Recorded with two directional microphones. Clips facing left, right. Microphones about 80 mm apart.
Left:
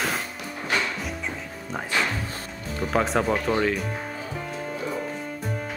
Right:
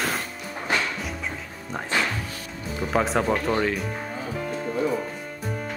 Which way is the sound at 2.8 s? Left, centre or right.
Centre.